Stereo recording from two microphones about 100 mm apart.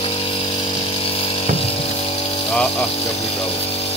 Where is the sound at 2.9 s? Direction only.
90° left.